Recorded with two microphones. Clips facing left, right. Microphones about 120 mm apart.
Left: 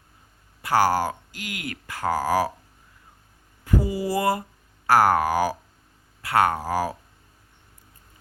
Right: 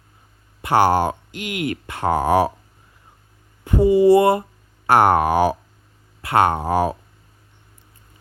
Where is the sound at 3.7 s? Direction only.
25° right (ahead or behind).